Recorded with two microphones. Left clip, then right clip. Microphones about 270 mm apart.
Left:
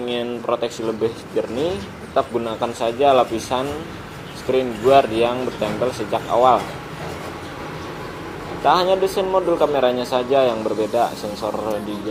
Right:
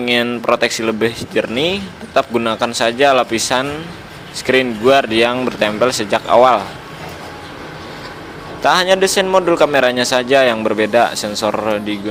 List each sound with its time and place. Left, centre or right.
0.0 s a man's voice: right
8.6 s a man's voice: right